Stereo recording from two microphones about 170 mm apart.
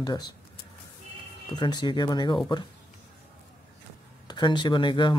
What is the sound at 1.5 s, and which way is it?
Speech, 25° left (ahead or behind).